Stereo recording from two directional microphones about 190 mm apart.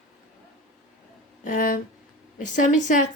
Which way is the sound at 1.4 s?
45° left (ahead or behind).